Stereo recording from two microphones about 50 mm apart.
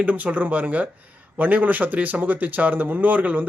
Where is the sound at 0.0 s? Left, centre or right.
Right.